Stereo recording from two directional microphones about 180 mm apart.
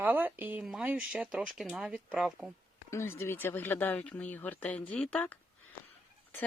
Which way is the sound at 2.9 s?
15° left (ahead or behind).